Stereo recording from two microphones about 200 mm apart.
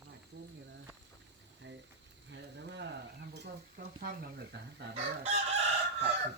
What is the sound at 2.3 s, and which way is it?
Stir, 60° right (ahead or behind).